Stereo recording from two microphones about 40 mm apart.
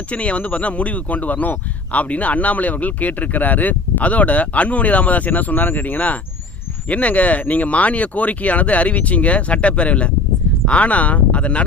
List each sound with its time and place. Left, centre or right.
0.1 s speech: left